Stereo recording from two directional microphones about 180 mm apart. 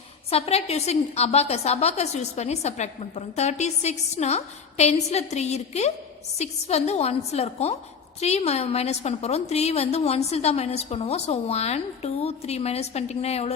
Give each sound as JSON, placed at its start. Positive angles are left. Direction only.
{"t": 0.3, "sound": "a woman's voice", "side_deg": 35}